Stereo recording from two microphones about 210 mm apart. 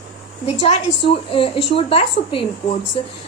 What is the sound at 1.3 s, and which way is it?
A woman's voice, 25° left (ahead or behind).